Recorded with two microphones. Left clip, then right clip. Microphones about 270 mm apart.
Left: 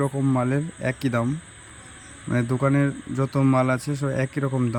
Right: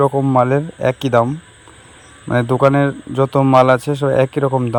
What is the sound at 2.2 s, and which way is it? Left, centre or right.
Speech, right.